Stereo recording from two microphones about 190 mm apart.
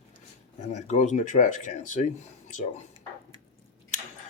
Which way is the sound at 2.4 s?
40° left (ahead or behind).